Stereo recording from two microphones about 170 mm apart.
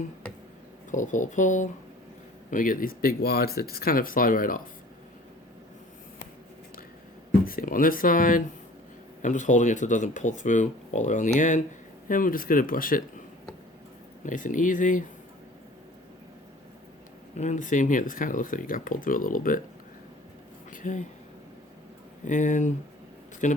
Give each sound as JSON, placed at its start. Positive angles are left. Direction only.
{"t": 0.9, "sound": "speech", "side_deg": 50}
{"t": 7.4, "sound": "speech", "side_deg": 55}
{"t": 14.3, "sound": "speech", "side_deg": 50}
{"t": 17.3, "sound": "speech", "side_deg": 45}
{"t": 20.7, "sound": "speech", "side_deg": 45}
{"t": 22.2, "sound": "speech", "side_deg": 50}